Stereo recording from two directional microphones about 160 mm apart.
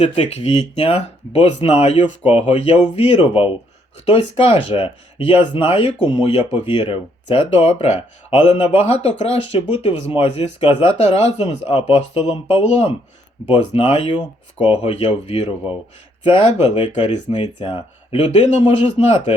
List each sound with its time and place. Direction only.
0.0 s speech: 40° left (ahead or behind)
6.1 s speech: 25° left (ahead or behind)
6.3 s speech: 40° left (ahead or behind)